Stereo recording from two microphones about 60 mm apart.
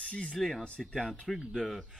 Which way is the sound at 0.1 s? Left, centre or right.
Centre.